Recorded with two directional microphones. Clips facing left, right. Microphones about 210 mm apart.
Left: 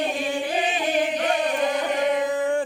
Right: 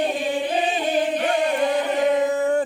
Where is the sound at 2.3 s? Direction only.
45° right (ahead or behind).